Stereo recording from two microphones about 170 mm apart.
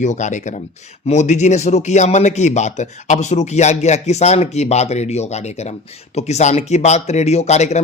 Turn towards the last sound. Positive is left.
turn(degrees=40)  # may be behind; listen again after turning